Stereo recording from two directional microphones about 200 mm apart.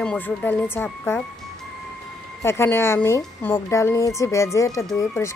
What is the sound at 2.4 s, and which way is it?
A woman's voice, 10° left (ahead or behind).